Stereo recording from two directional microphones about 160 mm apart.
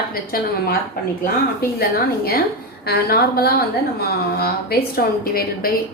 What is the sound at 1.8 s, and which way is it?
A woman's voice, 70° left (ahead or behind).